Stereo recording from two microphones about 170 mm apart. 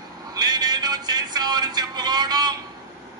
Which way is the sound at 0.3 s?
25° right (ahead or behind).